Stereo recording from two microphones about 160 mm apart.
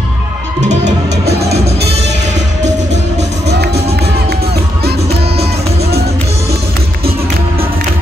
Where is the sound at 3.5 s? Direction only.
90° right.